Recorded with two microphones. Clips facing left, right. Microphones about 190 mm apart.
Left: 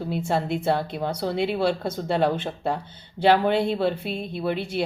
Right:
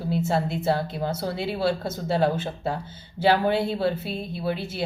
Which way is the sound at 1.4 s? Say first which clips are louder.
Even; 55° left (ahead or behind).